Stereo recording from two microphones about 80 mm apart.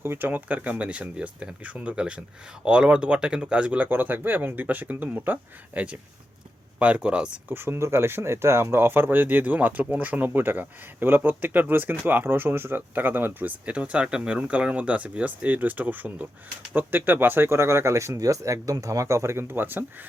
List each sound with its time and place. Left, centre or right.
0.0 s speech: right
7.5 s speech: right
13.7 s speech: centre